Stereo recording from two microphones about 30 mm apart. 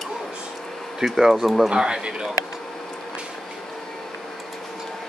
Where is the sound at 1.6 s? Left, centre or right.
Right.